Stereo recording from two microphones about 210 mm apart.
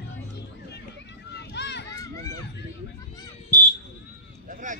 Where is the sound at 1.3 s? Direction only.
55° left (ahead or behind).